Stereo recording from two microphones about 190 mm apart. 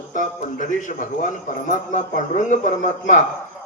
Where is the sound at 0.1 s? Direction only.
40° left (ahead or behind).